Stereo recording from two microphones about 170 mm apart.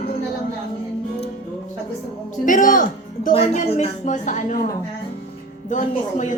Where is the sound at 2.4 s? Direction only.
50° left (ahead or behind).